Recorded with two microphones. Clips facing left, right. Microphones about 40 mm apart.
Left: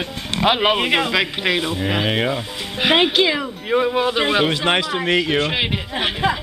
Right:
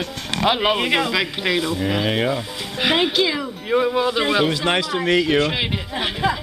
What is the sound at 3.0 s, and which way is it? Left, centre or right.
Speech, left.